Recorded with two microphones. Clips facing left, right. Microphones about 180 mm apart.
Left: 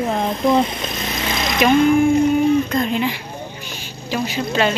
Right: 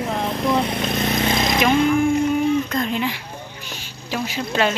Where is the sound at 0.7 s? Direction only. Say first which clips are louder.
Right 4 dB; 55° right (ahead or behind).